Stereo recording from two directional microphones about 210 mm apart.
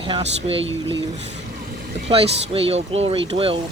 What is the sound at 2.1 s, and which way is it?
Speech, 25° right (ahead or behind).